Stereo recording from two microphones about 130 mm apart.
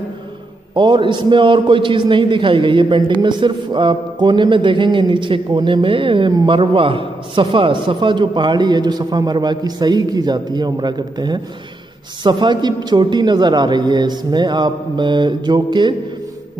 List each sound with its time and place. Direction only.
0.7 s a man's voice: 35° right (ahead or behind)